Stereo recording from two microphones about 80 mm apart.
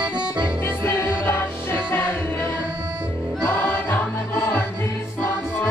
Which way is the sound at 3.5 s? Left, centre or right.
Left.